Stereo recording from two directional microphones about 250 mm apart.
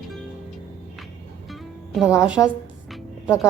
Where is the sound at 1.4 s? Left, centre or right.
Centre.